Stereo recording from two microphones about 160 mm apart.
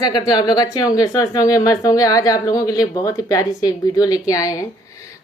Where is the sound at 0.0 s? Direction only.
25° left (ahead or behind).